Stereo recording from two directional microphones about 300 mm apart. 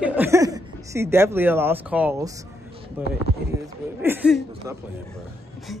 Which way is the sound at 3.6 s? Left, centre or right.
Centre.